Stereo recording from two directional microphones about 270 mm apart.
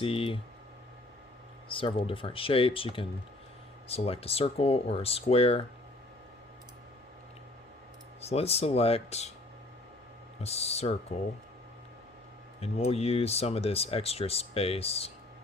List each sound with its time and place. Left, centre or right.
0.0 s speech: centre
1.7 s speech: centre
8.2 s speech: left
10.4 s speech: left
12.5 s speech: left